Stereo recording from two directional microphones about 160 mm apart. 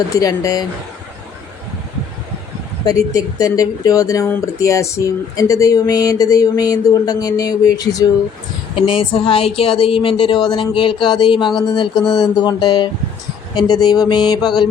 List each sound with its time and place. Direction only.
0.1 s speech: 20° left (ahead or behind)
2.8 s speech: 20° left (ahead or behind)
8.9 s speech: 35° left (ahead or behind)